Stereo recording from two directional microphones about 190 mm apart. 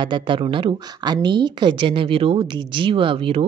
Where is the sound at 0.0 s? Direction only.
25° right (ahead or behind).